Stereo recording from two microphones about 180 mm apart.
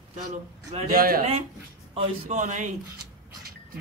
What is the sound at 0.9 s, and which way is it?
Speech, 55° right (ahead or behind).